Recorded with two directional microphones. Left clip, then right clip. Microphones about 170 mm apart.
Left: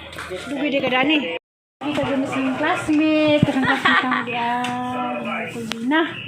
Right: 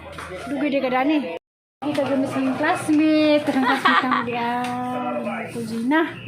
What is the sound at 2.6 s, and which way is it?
Speech, 5° right (ahead or behind).